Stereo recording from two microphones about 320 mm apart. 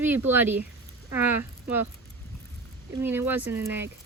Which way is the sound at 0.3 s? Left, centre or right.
Centre.